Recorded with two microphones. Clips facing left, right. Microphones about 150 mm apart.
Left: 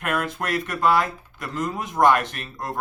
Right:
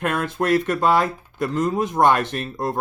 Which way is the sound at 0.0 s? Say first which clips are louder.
Right 4 dB; 25° right (ahead or behind).